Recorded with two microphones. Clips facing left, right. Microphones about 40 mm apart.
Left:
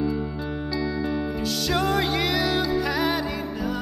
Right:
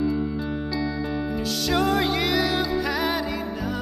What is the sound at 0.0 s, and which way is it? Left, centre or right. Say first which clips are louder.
Music: right 2 dB; centre.